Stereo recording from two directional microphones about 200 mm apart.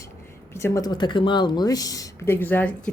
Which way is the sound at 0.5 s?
15° left (ahead or behind).